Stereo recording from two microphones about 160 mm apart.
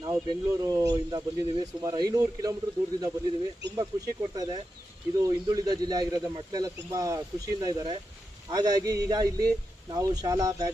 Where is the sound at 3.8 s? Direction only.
25° right (ahead or behind).